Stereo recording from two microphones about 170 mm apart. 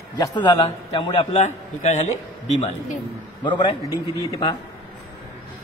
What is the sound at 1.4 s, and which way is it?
Speech, 45° left (ahead or behind).